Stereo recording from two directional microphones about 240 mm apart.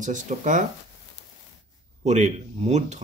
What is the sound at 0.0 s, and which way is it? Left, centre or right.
Speech, right.